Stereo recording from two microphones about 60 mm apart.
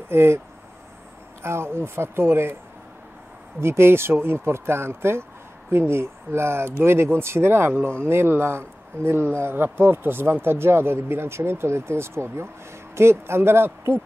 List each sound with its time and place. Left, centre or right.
0.1 s speech: right
1.4 s speech: right
3.6 s speech: right